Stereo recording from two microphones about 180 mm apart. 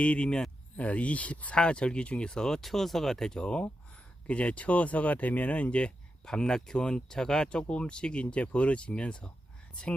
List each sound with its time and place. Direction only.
0.0 s speech: 5° left (ahead or behind)